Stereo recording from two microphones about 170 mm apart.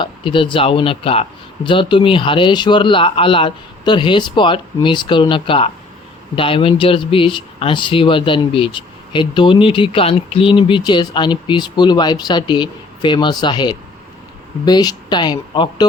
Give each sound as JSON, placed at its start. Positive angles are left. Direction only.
{"t": 0.0, "sound": "speech", "side_deg": 30}